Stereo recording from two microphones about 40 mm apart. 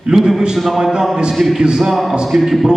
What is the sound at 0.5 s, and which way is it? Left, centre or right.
Speech, centre.